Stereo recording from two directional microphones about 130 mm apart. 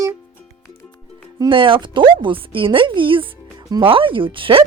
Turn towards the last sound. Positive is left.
turn(degrees=-45)  # may be behind; listen again after turning